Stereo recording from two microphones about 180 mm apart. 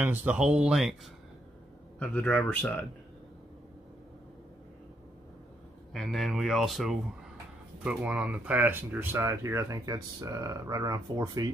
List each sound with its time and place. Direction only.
0.0 s speech: 10° right (ahead or behind)
2.0 s speech: 5° left (ahead or behind)
5.9 s speech: centre (ahead or behind); by 11.5 s 20° right (ahead or behind)